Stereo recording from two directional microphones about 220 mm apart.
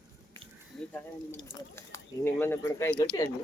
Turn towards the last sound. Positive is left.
turn(degrees=10)  # may be behind; listen again after turning